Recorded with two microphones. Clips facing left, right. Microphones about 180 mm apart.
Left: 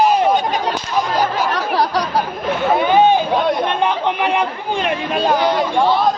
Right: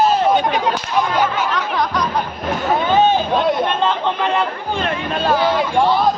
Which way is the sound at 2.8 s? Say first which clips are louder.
Left 2 dB; 15° left (ahead or behind).